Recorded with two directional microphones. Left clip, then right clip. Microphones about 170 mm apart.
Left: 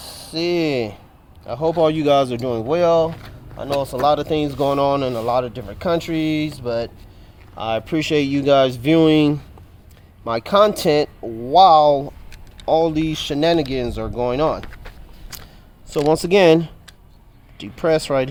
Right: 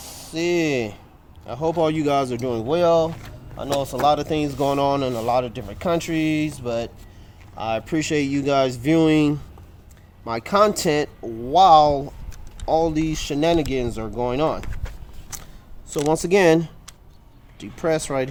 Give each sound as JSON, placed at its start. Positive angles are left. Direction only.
{"t": 0.0, "sound": "speech", "side_deg": 25}
{"t": 12.6, "sound": "speech", "side_deg": 25}
{"t": 16.0, "sound": "speech", "side_deg": 30}